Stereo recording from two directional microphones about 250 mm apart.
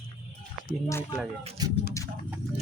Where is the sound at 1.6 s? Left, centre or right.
Centre.